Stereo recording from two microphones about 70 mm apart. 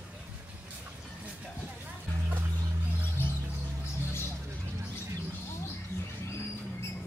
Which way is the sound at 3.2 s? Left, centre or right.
Left.